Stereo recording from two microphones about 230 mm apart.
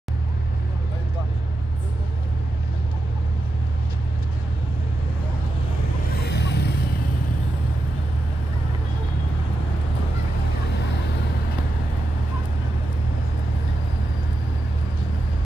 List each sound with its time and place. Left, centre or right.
6.1 s vehicle: left